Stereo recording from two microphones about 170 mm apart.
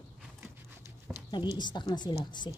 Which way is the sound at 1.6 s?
25° left (ahead or behind).